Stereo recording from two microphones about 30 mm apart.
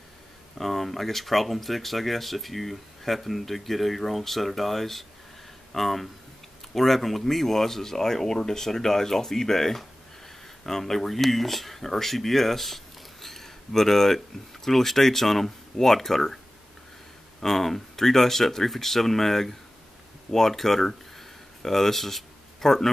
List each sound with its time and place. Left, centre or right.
0.6 s speech: centre
17.4 s speech: centre